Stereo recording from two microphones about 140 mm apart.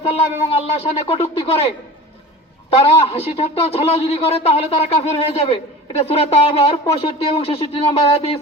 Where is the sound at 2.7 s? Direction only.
45° left (ahead or behind).